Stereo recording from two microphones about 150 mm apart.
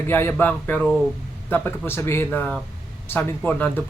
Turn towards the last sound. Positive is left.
turn(degrees=10)  # may be behind; listen again after turning